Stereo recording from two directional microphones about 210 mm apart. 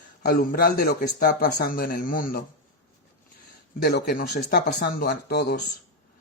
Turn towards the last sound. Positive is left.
turn(degrees=50)  # may be behind; listen again after turning